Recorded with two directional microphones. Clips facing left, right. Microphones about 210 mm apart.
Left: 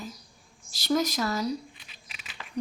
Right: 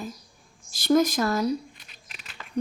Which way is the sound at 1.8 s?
Centre (ahead or behind).